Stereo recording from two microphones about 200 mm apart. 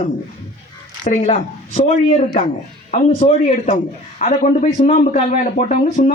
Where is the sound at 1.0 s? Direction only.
35° left (ahead or behind).